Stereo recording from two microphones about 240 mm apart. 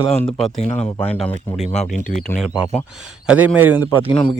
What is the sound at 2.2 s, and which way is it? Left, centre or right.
Speech, centre.